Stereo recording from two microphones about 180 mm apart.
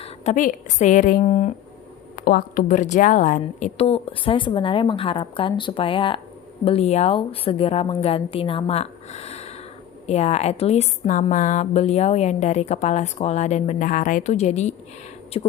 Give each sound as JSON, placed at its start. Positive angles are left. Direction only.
{"t": 0.0, "sound": "a woman's voice", "side_deg": 40}
{"t": 2.1, "sound": "a woman's voice", "side_deg": 50}